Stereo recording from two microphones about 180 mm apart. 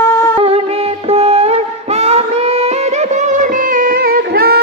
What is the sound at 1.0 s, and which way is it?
Music, 35° right (ahead or behind).